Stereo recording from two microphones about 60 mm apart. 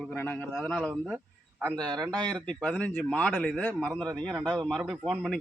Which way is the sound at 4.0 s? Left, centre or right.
Centre.